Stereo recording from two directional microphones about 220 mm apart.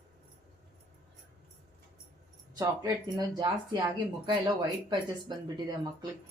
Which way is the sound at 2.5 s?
15° right (ahead or behind).